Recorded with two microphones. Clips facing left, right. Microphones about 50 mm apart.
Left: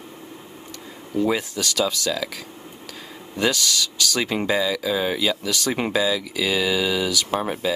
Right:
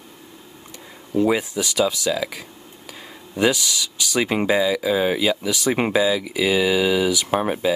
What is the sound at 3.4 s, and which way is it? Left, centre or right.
Speech, centre.